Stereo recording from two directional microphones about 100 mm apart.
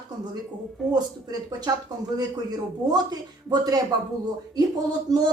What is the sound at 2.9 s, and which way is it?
Speech, 45° right (ahead or behind).